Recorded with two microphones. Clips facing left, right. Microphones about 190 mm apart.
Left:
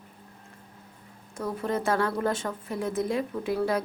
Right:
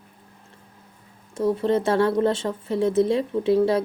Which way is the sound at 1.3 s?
25° right (ahead or behind).